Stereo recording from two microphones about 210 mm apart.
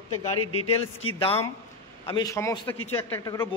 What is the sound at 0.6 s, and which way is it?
Speech, 25° left (ahead or behind).